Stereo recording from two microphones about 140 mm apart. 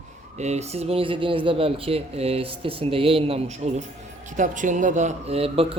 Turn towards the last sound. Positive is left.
turn(degrees=-45)  # may be behind; listen again after turning